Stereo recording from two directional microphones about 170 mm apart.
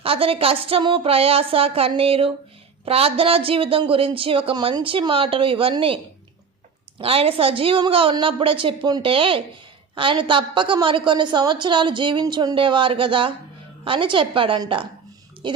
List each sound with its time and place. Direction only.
0.0 s speech: 35° right (ahead or behind)
7.0 s a woman's voice: 35° right (ahead or behind)